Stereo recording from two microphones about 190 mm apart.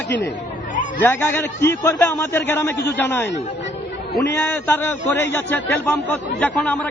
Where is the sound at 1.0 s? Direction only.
10° left (ahead or behind).